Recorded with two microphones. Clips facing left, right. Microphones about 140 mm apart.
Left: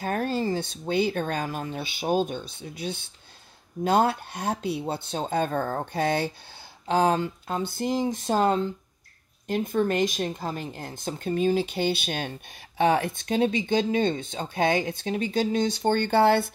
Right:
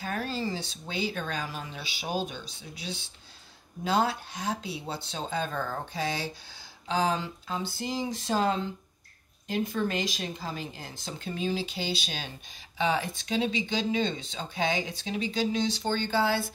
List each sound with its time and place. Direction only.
0.0 s speech: 50° left (ahead or behind)